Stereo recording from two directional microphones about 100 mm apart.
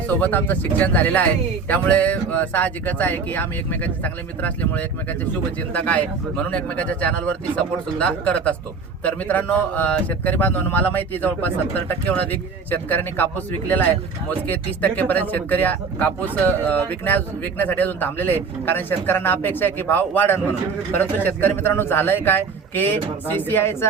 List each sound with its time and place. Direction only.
0.2 s speech: 15° left (ahead or behind)